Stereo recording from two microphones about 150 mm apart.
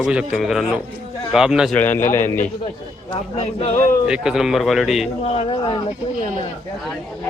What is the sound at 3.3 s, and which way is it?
Speech, 45° left (ahead or behind).